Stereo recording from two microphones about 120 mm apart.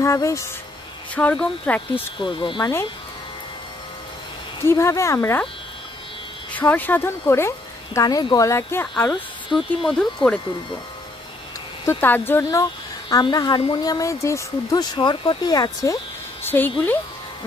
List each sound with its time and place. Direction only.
0.0 s speech: 25° left (ahead or behind)
1.1 s speech: 10° left (ahead or behind)
2.0 s speech: 40° left (ahead or behind)
4.6 s speech: 25° left (ahead or behind)
6.5 s speech: 15° left (ahead or behind)
9.5 s speech: centre (ahead or behind)
11.8 s speech: 20° left (ahead or behind)
13.1 s speech: 35° left (ahead or behind)
16.4 s speech: 15° left (ahead or behind)